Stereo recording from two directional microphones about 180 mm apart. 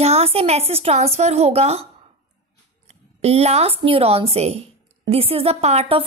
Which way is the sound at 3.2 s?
35° right (ahead or behind).